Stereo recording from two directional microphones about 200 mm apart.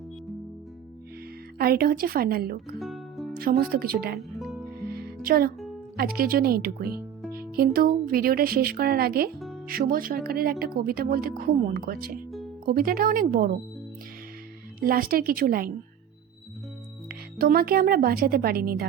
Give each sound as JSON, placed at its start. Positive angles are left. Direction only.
{"t": 1.5, "sound": "speech", "side_deg": -50}
{"t": 2.7, "sound": "music", "side_deg": 0}
{"t": 3.3, "sound": "speech", "side_deg": -50}
{"t": 4.2, "sound": "music", "side_deg": 0}
{"t": 4.9, "sound": "music", "side_deg": -50}
{"t": 6.0, "sound": "speech", "side_deg": -50}
{"t": 14.8, "sound": "speech", "side_deg": -45}
{"t": 17.1, "sound": "speech", "side_deg": -45}